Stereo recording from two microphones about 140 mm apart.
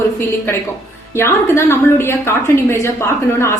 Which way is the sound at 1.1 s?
20° left (ahead or behind).